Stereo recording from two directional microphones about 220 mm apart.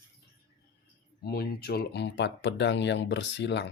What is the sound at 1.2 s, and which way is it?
Speech, 45° left (ahead or behind).